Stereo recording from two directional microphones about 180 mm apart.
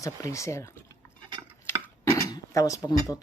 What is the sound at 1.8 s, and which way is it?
Dishes, 15° left (ahead or behind).